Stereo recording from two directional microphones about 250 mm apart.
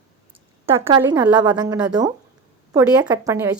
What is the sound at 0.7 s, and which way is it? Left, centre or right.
A woman's voice, centre.